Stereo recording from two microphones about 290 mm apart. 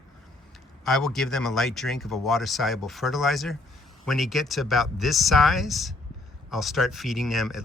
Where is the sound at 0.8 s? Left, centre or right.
Centre.